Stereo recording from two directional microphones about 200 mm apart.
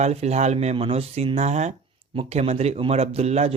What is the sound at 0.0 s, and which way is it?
Speech, 35° right (ahead or behind).